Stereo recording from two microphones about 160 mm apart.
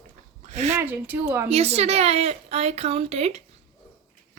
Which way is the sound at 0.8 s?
10° right (ahead or behind).